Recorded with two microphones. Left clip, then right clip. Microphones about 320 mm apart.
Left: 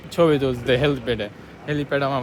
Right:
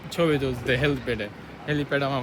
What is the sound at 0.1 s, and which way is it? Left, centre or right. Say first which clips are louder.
Speech: left 6 dB; centre.